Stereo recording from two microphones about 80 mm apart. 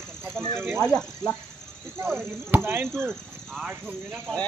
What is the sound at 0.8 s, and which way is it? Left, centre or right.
Speech, centre.